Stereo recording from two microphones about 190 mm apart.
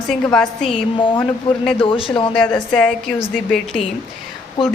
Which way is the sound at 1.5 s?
25° left (ahead or behind).